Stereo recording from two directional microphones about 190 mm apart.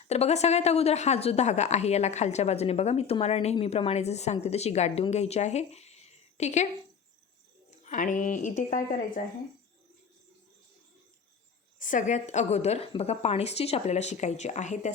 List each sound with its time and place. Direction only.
0.1 s a woman's voice: 35° left (ahead or behind)
7.7 s speech: 40° left (ahead or behind)
11.8 s a woman's voice: 45° left (ahead or behind)